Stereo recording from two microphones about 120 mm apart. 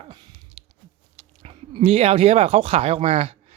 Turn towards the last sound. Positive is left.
turn(degrees=-65)  # may be behind; listen again after turning